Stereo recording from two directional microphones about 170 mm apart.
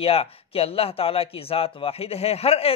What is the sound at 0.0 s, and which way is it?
Speech, 35° left (ahead or behind).